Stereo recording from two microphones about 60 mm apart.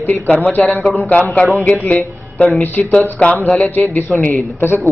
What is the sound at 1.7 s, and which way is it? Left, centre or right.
Speech, left.